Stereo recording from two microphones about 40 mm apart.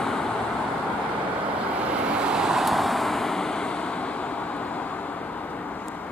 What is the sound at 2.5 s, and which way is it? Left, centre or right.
Vehicle, centre.